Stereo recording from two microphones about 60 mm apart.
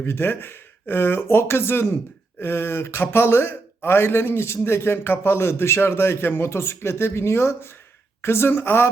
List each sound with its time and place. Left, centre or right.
0.0 s speech: left